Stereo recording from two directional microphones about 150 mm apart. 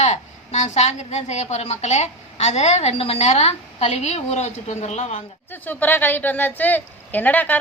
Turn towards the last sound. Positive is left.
turn(degrees=10)  # may be behind; listen again after turning